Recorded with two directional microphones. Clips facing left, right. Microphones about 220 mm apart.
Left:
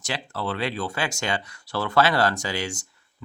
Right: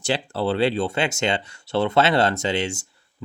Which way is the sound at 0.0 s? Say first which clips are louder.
Right 7 dB; 30° right (ahead or behind).